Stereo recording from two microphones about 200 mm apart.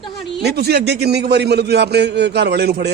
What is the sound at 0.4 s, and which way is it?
A man's voice, 55° right (ahead or behind).